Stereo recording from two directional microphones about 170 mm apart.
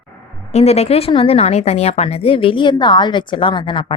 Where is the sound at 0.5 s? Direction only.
40° left (ahead or behind).